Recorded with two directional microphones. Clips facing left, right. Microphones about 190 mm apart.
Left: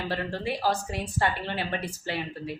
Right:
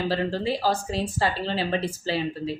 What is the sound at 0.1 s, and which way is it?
A woman's voice, 30° right (ahead or behind).